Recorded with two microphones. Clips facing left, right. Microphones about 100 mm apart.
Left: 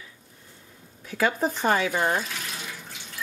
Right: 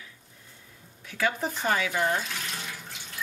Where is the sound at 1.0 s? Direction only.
40° left (ahead or behind).